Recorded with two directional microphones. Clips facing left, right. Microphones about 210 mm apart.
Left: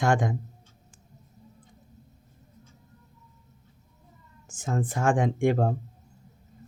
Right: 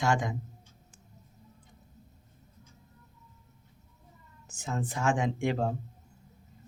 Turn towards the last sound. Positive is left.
turn(degrees=50)  # may be behind; listen again after turning